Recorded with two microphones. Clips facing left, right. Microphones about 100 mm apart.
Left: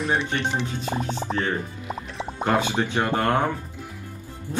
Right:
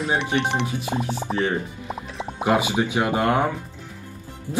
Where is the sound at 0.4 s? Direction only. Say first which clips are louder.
Right 3 dB; 65° right (ahead or behind).